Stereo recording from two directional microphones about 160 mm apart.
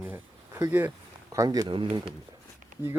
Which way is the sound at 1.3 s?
20° right (ahead or behind).